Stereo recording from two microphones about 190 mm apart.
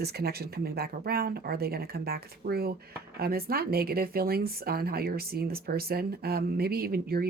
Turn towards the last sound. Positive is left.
turn(degrees=-55)  # may be behind; listen again after turning